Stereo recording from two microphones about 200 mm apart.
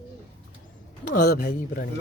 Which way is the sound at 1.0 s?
50° left (ahead or behind).